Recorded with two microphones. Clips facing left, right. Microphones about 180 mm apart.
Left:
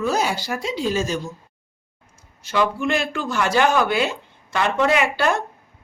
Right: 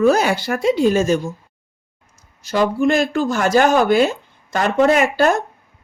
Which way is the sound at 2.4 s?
40° right (ahead or behind).